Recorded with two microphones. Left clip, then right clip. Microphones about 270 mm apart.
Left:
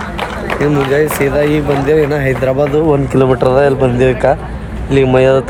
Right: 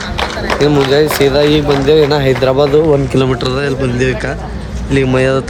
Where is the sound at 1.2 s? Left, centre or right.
Centre.